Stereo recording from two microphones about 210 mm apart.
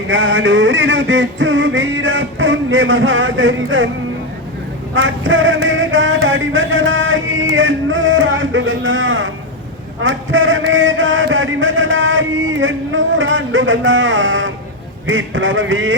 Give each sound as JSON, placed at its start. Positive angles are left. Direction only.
{"t": 0.1, "sound": "male singing", "side_deg": -60}
{"t": 4.9, "sound": "a sound", "side_deg": -65}
{"t": 15.0, "sound": "male singing", "side_deg": -65}